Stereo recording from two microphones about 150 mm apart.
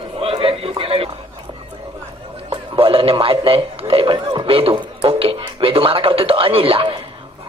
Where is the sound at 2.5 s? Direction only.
35° right (ahead or behind).